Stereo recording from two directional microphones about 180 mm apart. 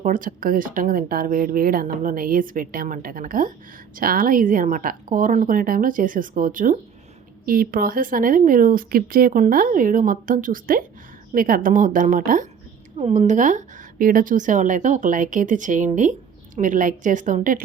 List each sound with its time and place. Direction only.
0.0 s speech: 45° right (ahead or behind)